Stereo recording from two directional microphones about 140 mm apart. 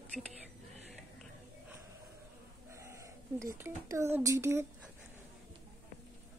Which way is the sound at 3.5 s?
20° right (ahead or behind).